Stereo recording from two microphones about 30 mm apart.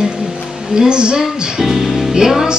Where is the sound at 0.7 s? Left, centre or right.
Right.